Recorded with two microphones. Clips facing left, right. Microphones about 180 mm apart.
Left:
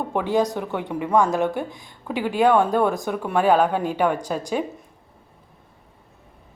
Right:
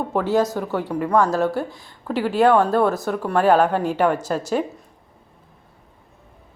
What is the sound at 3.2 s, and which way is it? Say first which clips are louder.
Speech: right 2 dB; 5° right (ahead or behind).